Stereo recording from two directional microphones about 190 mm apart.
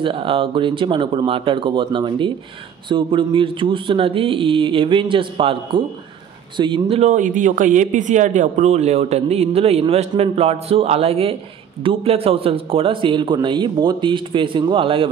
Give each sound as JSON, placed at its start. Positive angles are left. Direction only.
{"t": 0.0, "sound": "a man's voice", "side_deg": -30}